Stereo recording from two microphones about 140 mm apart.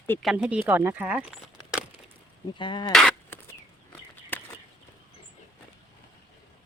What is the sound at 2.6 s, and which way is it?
Speech, 35° left (ahead or behind).